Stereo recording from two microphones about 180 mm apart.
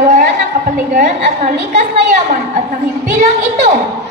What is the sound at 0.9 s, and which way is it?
A woman's voice, 40° right (ahead or behind).